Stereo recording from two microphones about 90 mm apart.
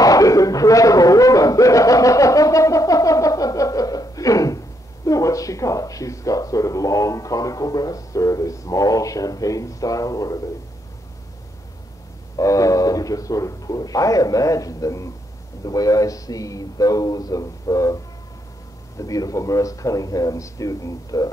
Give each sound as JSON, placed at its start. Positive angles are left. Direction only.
{"t": 0.0, "sound": "a sound", "side_deg": 40}
{"t": 5.0, "sound": "speech", "side_deg": 40}
{"t": 12.4, "sound": "speech", "side_deg": 40}